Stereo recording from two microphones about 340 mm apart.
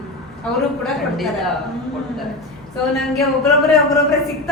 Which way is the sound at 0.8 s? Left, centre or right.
Centre.